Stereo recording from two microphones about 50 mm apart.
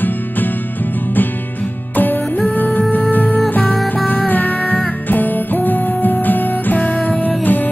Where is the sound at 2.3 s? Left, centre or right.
Left.